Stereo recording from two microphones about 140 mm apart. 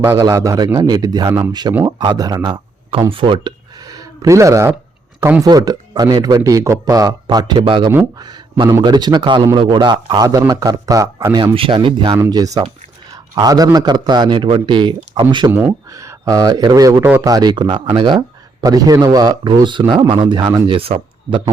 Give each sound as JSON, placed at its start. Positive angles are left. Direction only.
{"t": 0.0, "sound": "a man's voice", "side_deg": -20}
{"t": 11.5, "sound": "a man's voice", "side_deg": -40}
{"t": 12.1, "sound": "a man's voice", "side_deg": -25}
{"t": 15.5, "sound": "a man's voice", "side_deg": -20}